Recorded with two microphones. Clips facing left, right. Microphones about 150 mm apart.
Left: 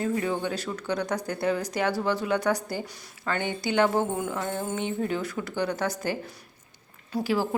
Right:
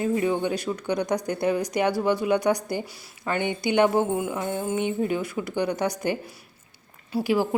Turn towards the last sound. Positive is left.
turn(degrees=-15)  # may be behind; listen again after turning